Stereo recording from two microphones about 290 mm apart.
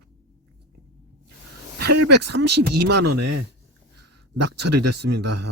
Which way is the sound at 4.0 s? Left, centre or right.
Right.